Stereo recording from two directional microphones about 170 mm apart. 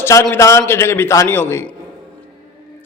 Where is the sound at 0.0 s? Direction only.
15° left (ahead or behind).